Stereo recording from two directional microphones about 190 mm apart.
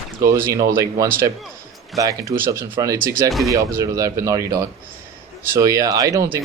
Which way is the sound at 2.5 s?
20° right (ahead or behind).